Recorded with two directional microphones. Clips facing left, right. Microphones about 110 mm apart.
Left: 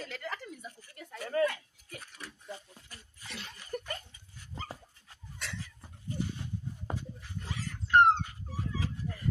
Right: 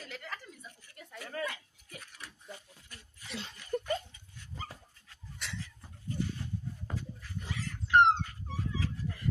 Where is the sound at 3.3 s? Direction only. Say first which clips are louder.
Right 4 dB; 25° right (ahead or behind).